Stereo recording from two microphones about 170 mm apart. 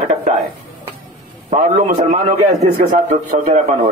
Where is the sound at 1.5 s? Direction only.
40° right (ahead or behind).